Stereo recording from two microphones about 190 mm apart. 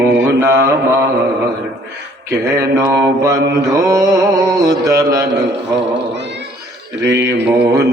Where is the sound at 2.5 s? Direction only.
15° right (ahead or behind).